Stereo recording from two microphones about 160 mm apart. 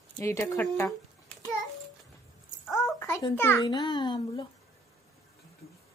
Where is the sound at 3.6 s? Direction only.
30° left (ahead or behind).